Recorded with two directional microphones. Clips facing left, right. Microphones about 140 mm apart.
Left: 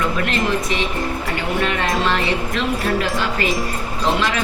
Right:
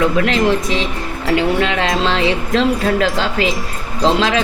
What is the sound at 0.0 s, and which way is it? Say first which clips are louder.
Speech: right 6 dB; 90° right.